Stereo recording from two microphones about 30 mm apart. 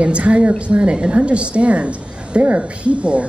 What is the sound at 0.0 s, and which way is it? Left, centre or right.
A woman's voice, right.